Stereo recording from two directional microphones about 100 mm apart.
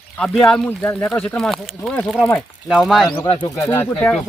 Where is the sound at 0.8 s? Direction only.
25° left (ahead or behind).